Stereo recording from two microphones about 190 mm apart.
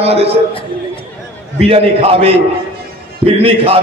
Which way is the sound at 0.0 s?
30° right (ahead or behind).